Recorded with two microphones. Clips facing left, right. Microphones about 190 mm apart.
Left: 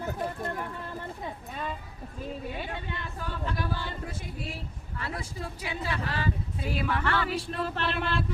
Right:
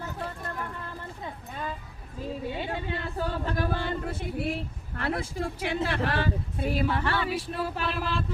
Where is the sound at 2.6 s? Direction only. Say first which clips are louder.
Right 4 dB; 30° right (ahead or behind); by 6.7 s 70° right (ahead or behind).